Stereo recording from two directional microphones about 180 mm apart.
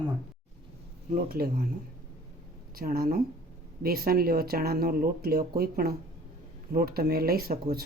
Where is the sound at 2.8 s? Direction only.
55° right (ahead or behind).